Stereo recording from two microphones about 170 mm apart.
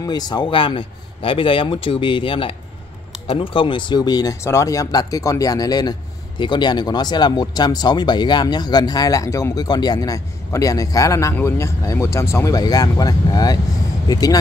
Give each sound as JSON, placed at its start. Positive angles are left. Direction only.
{"t": 0.0, "sound": "speech", "side_deg": 25}